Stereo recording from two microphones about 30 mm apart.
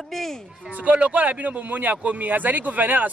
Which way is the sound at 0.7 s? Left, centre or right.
Right.